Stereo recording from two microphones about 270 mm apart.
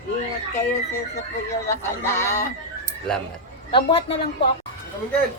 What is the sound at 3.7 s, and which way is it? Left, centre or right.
Speech, centre.